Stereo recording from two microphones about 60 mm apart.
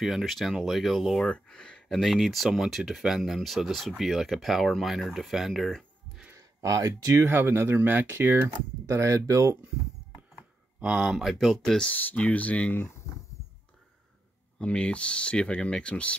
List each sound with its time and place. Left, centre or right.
0.0 s speech: centre
1.2 s speech: centre
1.9 s speech: centre
3.2 s speech: centre
6.3 s speech: right
7.2 s speech: right
10.8 s speech: centre
11.9 s speech: left
14.6 s speech: centre